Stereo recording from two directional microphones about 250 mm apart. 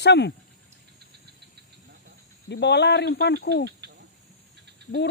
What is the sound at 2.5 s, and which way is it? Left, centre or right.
Speech, left.